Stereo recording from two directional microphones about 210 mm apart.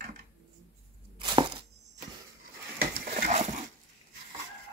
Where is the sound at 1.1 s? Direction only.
20° right (ahead or behind).